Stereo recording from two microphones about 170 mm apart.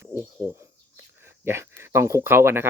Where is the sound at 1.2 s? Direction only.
15° right (ahead or behind).